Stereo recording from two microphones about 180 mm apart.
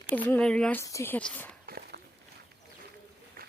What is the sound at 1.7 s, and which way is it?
Walk, 55° right (ahead or behind).